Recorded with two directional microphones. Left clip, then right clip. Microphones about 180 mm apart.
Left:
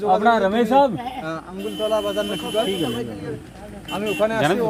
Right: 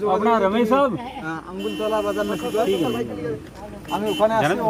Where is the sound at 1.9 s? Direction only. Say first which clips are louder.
Left 1 dB; 20° left (ahead or behind).